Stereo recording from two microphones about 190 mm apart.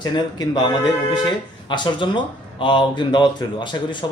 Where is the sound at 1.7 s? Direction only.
25° left (ahead or behind).